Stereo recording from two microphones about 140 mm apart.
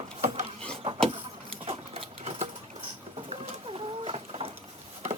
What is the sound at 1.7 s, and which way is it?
Sewing machine, 45° right (ahead or behind).